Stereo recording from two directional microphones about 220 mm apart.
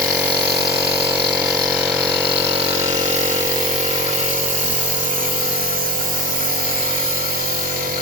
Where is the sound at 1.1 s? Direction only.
15° right (ahead or behind).